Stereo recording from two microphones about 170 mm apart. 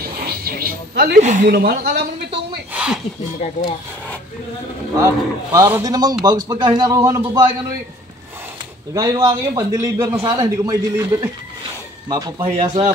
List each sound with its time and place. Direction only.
0.0 s a sound: 60° right (ahead or behind)
1.1 s speech: 45° right (ahead or behind)
1.5 s speech: 70° right (ahead or behind)
2.7 s a sound: 5° right (ahead or behind)
4.9 s a man's voice: 15° right (ahead or behind)
8.9 s a man's voice: 20° right (ahead or behind)
12.6 s a man's voice: 40° right (ahead or behind)